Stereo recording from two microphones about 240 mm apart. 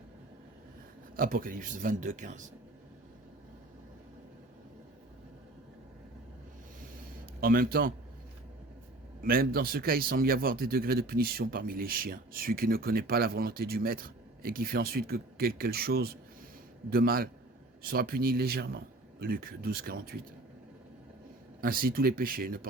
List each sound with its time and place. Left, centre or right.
1.1 s speech: right
7.4 s speech: right
9.2 s speech: right
21.6 s speech: right